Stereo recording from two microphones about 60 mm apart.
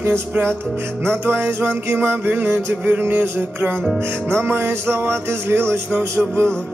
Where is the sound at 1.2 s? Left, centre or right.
Right.